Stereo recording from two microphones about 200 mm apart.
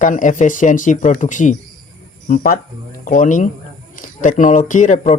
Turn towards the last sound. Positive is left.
turn(degrees=40)  # may be behind; listen again after turning